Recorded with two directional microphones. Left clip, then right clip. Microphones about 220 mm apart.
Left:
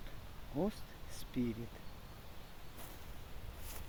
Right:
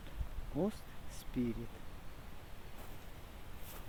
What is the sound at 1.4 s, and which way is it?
Speech, centre (ahead or behind).